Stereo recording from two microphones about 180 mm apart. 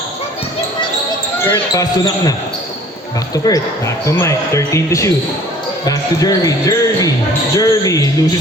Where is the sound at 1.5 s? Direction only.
20° left (ahead or behind).